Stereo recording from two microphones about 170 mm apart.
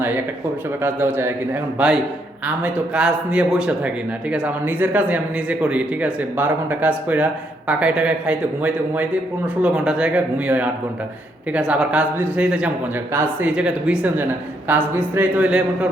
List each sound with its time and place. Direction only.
0.8 s a man's voice: 10° right (ahead or behind)
2.6 s a man's voice: 5° right (ahead or behind)